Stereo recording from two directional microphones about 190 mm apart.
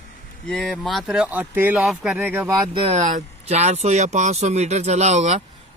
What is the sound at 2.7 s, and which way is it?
Speech, 35° right (ahead or behind).